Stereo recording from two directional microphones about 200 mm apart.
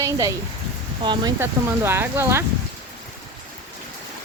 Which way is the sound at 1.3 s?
10° right (ahead or behind).